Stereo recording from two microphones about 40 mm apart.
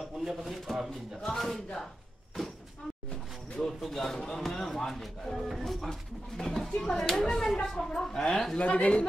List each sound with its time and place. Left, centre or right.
0.2 s speech: centre
0.8 s speech: centre
3.1 s a sound: centre
3.8 s speech: centre
5.9 s speech: centre
8.5 s speech: left